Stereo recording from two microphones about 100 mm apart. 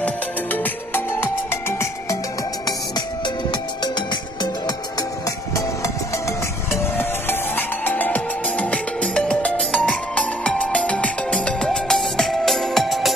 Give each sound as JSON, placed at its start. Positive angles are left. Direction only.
{"t": 0.0, "sound": "music", "side_deg": 20}
{"t": 7.0, "sound": "music", "side_deg": 20}